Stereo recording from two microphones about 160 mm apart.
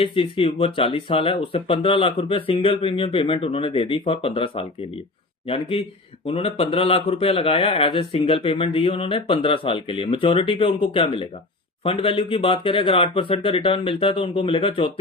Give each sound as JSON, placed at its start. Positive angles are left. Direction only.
{"t": 0.0, "sound": "speech", "side_deg": 35}